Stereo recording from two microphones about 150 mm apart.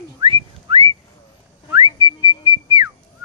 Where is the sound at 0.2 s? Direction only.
40° right (ahead or behind).